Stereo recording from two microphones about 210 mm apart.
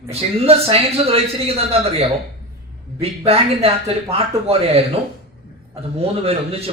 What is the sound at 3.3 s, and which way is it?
Speech, 30° right (ahead or behind).